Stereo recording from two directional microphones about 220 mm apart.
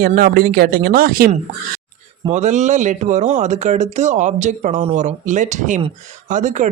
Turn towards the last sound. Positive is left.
turn(degrees=-35)  # may be behind; listen again after turning